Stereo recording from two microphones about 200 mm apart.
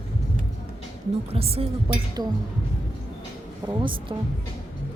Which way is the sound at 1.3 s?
30° right (ahead or behind).